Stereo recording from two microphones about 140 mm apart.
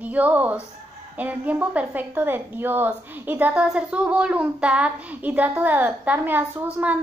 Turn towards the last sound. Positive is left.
turn(degrees=-10)  # may be behind; listen again after turning